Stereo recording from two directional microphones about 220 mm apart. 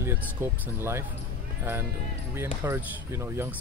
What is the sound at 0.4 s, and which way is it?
Speech, 10° right (ahead or behind).